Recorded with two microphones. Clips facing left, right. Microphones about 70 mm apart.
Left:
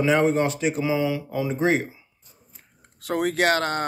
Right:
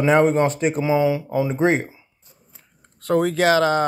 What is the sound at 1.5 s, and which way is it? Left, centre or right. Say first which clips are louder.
Speech: right 2 dB; right.